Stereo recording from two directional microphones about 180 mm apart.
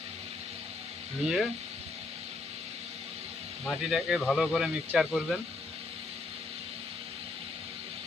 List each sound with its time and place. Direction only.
1.2 s speech: centre (ahead or behind)
3.6 s speech: centre (ahead or behind)